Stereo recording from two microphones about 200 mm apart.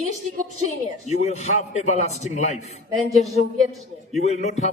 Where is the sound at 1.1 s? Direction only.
35° left (ahead or behind).